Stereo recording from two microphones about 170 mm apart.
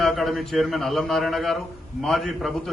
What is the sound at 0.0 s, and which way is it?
A man's voice, centre (ahead or behind).